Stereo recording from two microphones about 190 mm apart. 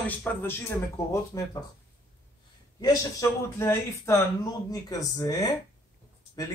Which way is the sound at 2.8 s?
20° left (ahead or behind).